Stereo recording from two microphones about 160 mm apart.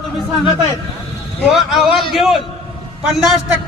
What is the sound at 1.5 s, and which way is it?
Speech, centre (ahead or behind).